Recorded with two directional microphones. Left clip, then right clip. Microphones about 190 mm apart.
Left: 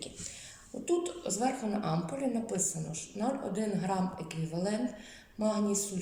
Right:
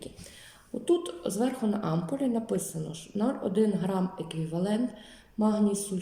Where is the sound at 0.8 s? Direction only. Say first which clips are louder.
Right 4 dB; 40° right (ahead or behind).